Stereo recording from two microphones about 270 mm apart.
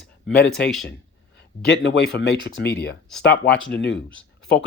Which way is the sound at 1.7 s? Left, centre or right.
Left.